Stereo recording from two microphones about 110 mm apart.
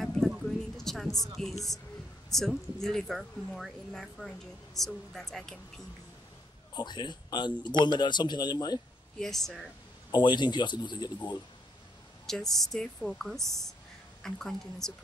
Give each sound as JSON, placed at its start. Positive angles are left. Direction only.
{"t": 0.0, "sound": "a sound", "side_deg": 0}
{"t": 2.2, "sound": "speech", "side_deg": 5}
{"t": 6.7, "sound": "a man's voice", "side_deg": 40}
{"t": 9.2, "sound": "speech", "side_deg": 5}
{"t": 10.1, "sound": "a man's voice", "side_deg": 45}
{"t": 12.3, "sound": "speech", "side_deg": 5}